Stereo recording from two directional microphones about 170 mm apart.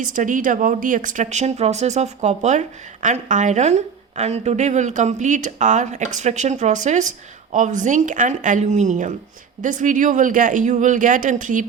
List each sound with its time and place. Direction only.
0.0 s speech: 50° right (ahead or behind)